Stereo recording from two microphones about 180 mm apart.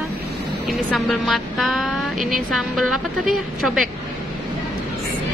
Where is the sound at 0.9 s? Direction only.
Centre (ahead or behind).